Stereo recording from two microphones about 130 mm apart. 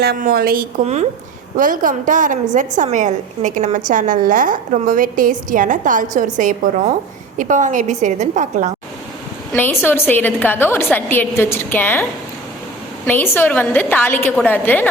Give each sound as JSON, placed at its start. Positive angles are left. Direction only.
{"t": 0.2, "sound": "a woman's voice", "side_deg": -90}
{"t": 1.5, "sound": "a woman's voice", "side_deg": -90}
{"t": 9.5, "sound": "a woman's voice", "side_deg": 15}
{"t": 13.1, "sound": "a woman's voice", "side_deg": 15}